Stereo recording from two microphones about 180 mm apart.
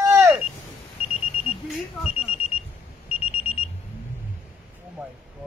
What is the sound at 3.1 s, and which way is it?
Alarm, 35° left (ahead or behind).